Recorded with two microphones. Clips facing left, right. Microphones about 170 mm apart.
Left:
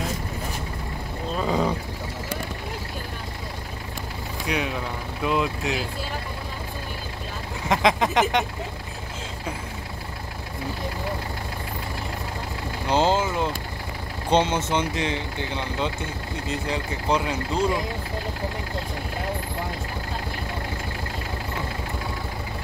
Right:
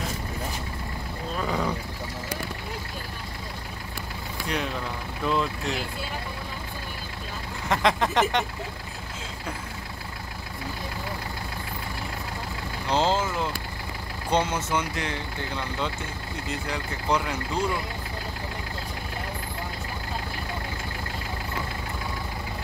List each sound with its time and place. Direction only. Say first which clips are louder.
1.3 s roaring cats: left 4 dB; 25° left (ahead or behind)
5.2 s speech: left 2 dB; 10° left (ahead or behind)
7.7 s speech: left 2 dB; 15° left (ahead or behind)
12.8 s speech: left 3 dB; 15° left (ahead or behind)